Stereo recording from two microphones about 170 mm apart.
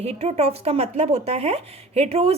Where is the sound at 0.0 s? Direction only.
35° right (ahead or behind).